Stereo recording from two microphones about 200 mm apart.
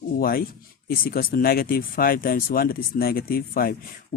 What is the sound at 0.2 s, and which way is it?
Speech, 50° left (ahead or behind).